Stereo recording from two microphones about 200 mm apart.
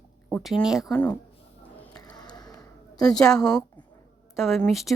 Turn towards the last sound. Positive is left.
turn(degrees=0)  # may be behind; listen again after turning